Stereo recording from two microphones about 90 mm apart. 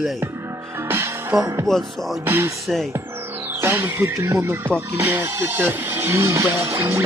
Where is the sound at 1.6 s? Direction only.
5° left (ahead or behind).